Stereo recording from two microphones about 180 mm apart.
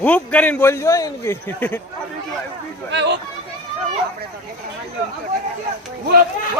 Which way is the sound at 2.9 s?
75° right (ahead or behind).